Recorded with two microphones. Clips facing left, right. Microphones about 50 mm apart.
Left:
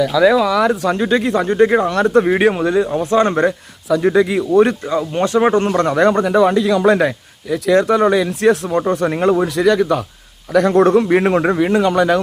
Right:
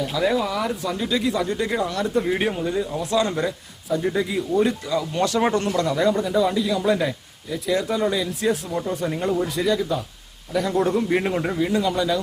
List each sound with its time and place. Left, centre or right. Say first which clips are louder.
0.0 s speech: left 9 dB; left
3.0 s a man's voice: left 6 dB; left
3.8 s speech: left 9 dB; left
4.9 s speech: left 5 dB; left
5.6 s speech: left 7 dB; left